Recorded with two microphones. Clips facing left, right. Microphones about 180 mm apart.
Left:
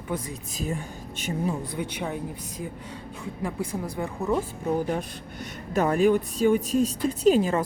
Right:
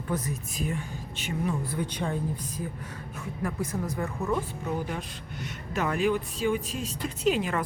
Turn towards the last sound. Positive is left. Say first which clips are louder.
# left 6 dB
turn(degrees=35)  # may be behind; listen again after turning